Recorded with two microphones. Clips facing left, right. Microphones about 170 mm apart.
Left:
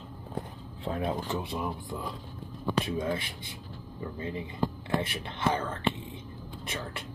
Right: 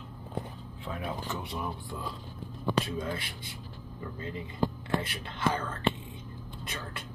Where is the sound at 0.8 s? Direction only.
30° left (ahead or behind).